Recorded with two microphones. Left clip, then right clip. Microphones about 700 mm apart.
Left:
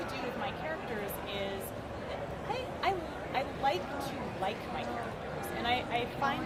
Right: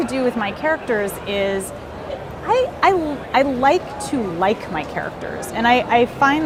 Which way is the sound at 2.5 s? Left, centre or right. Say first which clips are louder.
Right 19 dB; right.